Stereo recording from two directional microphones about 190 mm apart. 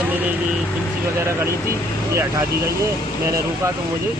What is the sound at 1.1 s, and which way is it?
Speech, 15° right (ahead or behind).